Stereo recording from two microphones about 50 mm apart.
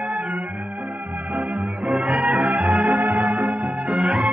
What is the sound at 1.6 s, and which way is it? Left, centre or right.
Music, centre.